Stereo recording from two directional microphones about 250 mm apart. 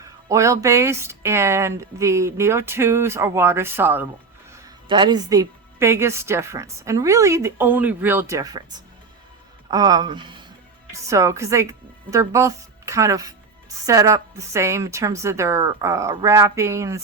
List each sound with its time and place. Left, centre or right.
0.0 s speech: centre
9.6 s speech: centre